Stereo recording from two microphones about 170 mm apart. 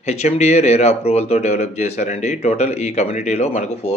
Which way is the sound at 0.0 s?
40° left (ahead or behind).